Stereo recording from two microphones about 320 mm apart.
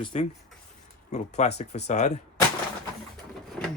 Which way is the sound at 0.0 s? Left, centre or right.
Centre.